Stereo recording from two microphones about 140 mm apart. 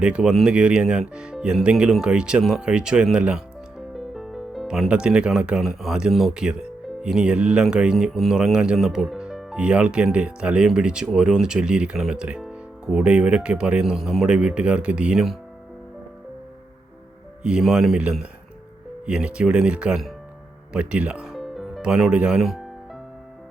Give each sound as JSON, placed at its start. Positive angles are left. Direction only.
{"t": 0.0, "sound": "speech", "side_deg": -5}
{"t": 17.4, "sound": "speech", "side_deg": -5}